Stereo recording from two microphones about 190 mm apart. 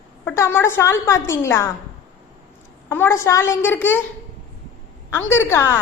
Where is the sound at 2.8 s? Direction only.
10° left (ahead or behind).